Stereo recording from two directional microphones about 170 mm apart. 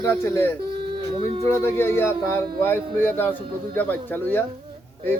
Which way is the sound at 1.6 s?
15° left (ahead or behind).